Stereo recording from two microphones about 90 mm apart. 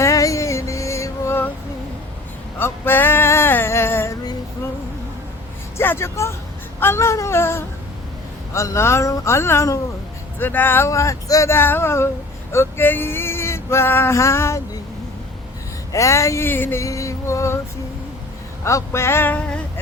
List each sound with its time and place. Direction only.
0.0 s music: 35° left (ahead or behind)
2.6 s male singing: 25° left (ahead or behind)
5.7 s speech: 25° left (ahead or behind)
6.7 s a sound: 30° left (ahead or behind)
8.5 s speech: 35° left (ahead or behind)
10.3 s speech: 20° left (ahead or behind)
11.5 s a sound: 25° left (ahead or behind)
12.5 s male singing: 30° left (ahead or behind)
15.9 s speech: 35° left (ahead or behind)
16.5 s a sound: 25° left (ahead or behind)
16.8 s music: 35° left (ahead or behind)
18.6 s a sound: 30° left (ahead or behind)